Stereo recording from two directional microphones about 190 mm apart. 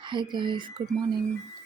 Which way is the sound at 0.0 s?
25° right (ahead or behind).